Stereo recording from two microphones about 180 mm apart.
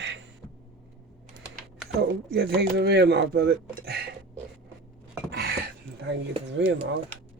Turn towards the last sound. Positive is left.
turn(degrees=-80)